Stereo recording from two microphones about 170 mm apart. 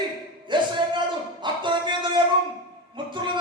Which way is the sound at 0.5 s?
30° right (ahead or behind).